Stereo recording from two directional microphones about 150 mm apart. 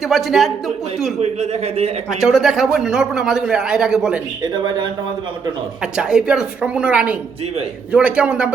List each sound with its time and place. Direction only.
0.1 s a man's voice: centre (ahead or behind)
1.2 s speech: 45° right (ahead or behind)
2.0 s a man's voice: 5° right (ahead or behind)
5.8 s a woman's voice: 5° right (ahead or behind)